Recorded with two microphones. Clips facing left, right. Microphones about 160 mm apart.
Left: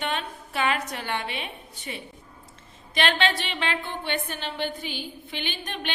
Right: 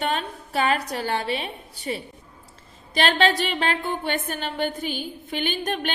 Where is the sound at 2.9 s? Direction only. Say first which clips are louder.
Right 4 dB; 40° right (ahead or behind).